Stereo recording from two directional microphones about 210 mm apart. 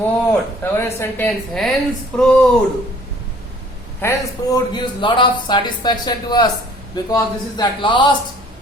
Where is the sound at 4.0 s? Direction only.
15° left (ahead or behind).